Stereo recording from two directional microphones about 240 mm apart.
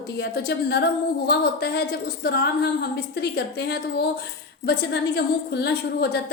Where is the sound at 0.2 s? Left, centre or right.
Left.